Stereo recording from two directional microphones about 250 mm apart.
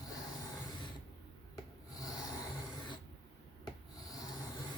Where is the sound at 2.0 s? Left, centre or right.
Centre.